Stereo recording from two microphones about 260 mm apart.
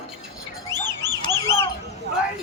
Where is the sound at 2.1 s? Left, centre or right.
Right.